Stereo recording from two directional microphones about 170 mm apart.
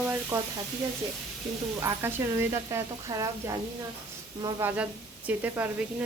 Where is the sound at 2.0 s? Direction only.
15° right (ahead or behind).